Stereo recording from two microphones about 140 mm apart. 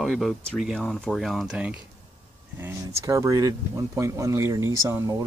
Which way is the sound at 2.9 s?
20° right (ahead or behind).